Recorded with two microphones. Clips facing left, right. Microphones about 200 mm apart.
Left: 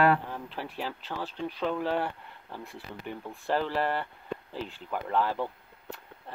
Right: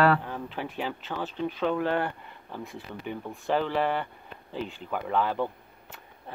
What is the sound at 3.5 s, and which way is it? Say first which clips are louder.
Speech: right 2 dB; centre (ahead or behind).